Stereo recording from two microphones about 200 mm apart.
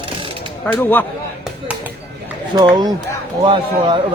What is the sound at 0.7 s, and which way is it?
Speech, 10° left (ahead or behind).